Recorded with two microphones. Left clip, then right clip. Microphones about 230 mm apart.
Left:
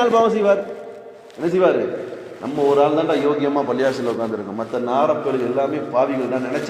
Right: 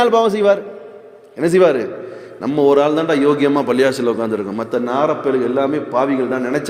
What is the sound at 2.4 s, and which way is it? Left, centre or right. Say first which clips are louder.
A man's voice: right 3 dB; right.